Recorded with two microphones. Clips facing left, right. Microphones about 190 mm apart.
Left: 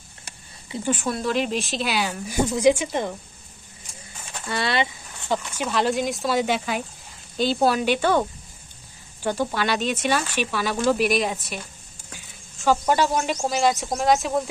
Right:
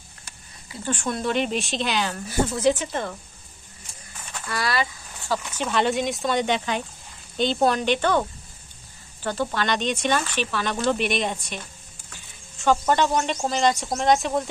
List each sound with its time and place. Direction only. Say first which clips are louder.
0.8 s speech: left 1 dB; 5° left (ahead or behind)
4.5 s speech: left 2 dB; 25° left (ahead or behind)
5.5 s speech: right 1 dB; 5° left (ahead or behind)
12.5 s speech: even; 5° left (ahead or behind)